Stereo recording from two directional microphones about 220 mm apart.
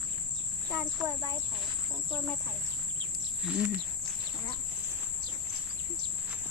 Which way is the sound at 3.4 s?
5° right (ahead or behind).